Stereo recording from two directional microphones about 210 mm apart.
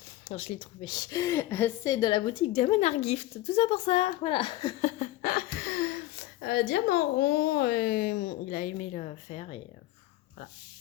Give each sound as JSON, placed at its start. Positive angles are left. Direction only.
{"t": 0.3, "sound": "a woman's voice", "side_deg": 30}
{"t": 5.2, "sound": "speech", "side_deg": 45}